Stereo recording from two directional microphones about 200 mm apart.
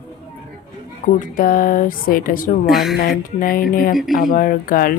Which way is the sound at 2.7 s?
Centre (ahead or behind).